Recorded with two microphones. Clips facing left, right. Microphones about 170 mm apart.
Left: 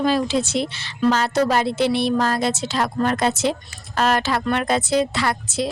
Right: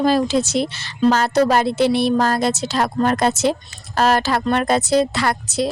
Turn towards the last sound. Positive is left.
turn(degrees=-40)  # may be behind; listen again after turning